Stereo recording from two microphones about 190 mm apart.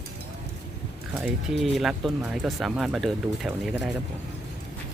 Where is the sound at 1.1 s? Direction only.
5° right (ahead or behind).